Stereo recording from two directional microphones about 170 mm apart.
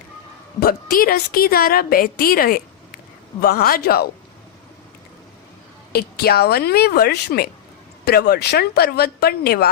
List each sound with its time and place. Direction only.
0.6 s a woman's voice: 60° left (ahead or behind)
5.9 s speech: 70° left (ahead or behind)